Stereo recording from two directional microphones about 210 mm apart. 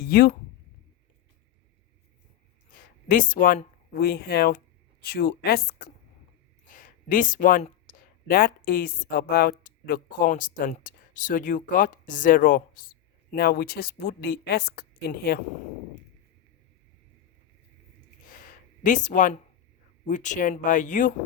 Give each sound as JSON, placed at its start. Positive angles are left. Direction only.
{"t": 0.0, "sound": "speech", "side_deg": 45}
{"t": 3.1, "sound": "a woman's voice", "side_deg": 40}
{"t": 18.3, "sound": "a sound", "side_deg": 40}
{"t": 20.1, "sound": "speech", "side_deg": 35}